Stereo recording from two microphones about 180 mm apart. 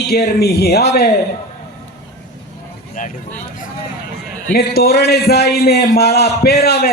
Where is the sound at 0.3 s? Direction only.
60° left (ahead or behind).